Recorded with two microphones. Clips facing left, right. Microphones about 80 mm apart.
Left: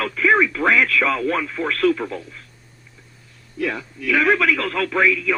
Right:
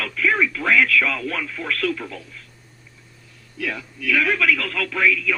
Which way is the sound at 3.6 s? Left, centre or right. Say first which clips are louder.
Left 3 dB; left.